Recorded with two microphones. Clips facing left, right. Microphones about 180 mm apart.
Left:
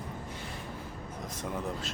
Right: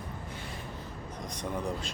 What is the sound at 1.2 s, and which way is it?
Speech, 5° left (ahead or behind).